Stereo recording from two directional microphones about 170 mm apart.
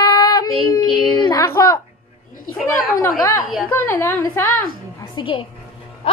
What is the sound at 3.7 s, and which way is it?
Speech, 15° left (ahead or behind).